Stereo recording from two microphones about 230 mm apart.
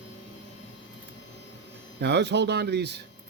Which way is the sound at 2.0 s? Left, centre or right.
Right.